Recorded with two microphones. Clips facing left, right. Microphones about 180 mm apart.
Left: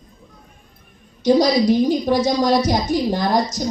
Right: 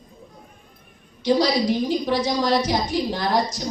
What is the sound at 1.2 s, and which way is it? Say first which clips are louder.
A woman's voice: left 5 dB; 45° left (ahead or behind).